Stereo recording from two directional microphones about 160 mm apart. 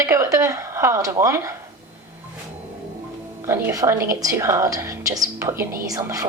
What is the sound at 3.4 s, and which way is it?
A woman's voice, 20° right (ahead or behind).